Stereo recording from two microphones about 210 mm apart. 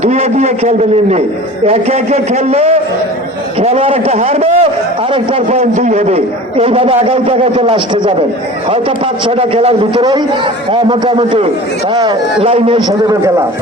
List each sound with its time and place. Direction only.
0.0 s a man's voice: 30° right (ahead or behind)
9.2 s a man's voice: 25° right (ahead or behind)